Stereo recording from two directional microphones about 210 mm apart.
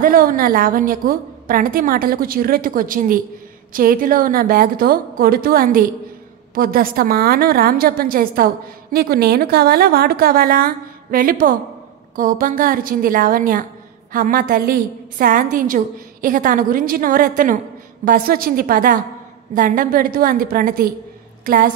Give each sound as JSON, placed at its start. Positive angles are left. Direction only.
{"t": 0.0, "sound": "a woman's voice", "side_deg": -40}